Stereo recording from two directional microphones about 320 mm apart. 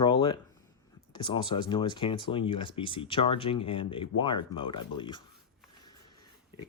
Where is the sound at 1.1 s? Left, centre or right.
Centre.